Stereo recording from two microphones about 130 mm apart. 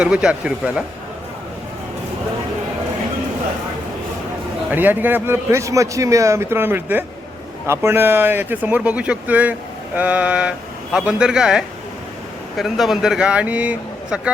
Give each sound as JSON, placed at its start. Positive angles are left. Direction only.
{"t": 0.0, "sound": "speech", "side_deg": -5}
{"t": 4.7, "sound": "a man's voice", "side_deg": -15}